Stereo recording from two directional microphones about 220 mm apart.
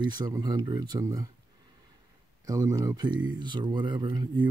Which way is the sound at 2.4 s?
15° right (ahead or behind).